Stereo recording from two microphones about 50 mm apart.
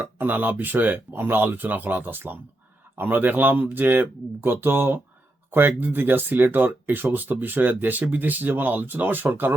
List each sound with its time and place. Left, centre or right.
0.0 s speech: right